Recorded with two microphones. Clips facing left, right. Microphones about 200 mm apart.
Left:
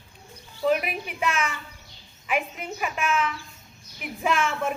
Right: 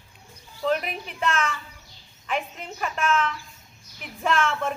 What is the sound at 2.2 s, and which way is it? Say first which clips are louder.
A woman's voice: left 2 dB; 10° left (ahead or behind).